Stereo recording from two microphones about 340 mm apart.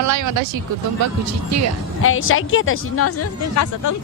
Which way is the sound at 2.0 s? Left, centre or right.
Left.